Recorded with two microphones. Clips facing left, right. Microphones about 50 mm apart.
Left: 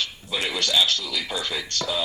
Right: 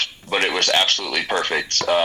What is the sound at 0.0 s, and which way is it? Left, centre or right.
A man's voice, right.